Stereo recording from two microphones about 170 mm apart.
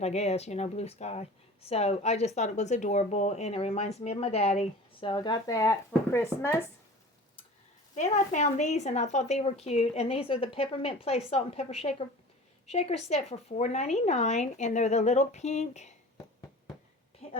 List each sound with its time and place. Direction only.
0.0 s speech: 40° left (ahead or behind); by 6.6 s 15° left (ahead or behind)
7.9 s a woman's voice: 45° left (ahead or behind)